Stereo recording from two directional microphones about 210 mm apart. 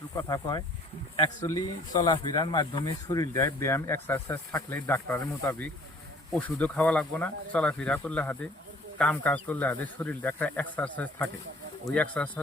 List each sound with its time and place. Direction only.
0.2 s speech: 20° left (ahead or behind)
1.6 s speech: 20° left (ahead or behind)